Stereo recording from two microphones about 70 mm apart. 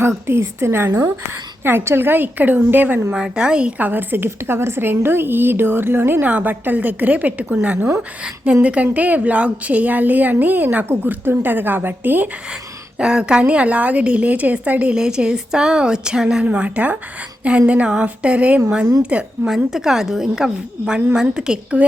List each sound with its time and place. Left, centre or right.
0.3 s a woman's voice: right
3.1 s a woman's voice: centre; by 12.3 s right
13.0 s a woman's voice: centre
19.5 s a woman's voice: centre